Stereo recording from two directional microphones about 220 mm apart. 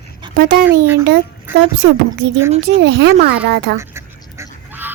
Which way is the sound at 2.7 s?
50° right (ahead or behind).